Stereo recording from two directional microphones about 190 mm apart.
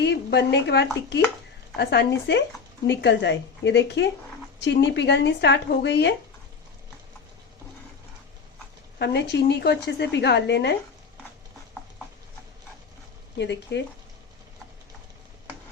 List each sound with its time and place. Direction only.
0.0 s a woman's voice: 60° left (ahead or behind)
9.0 s a woman's voice: 60° left (ahead or behind)
13.4 s a woman's voice: 65° left (ahead or behind)